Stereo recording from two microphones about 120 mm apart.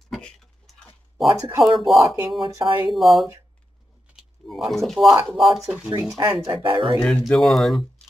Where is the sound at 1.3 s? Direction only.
25° right (ahead or behind).